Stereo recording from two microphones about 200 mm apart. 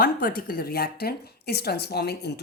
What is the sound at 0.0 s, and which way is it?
Speech, 45° left (ahead or behind).